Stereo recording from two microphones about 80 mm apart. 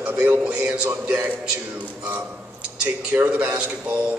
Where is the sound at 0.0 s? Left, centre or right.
Centre.